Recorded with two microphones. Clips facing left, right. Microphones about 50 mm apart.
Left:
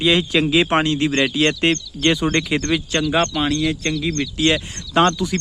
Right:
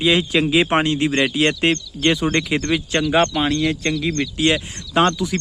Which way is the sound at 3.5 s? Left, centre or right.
Right.